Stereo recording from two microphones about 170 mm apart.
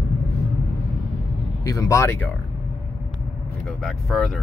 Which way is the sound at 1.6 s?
20° left (ahead or behind).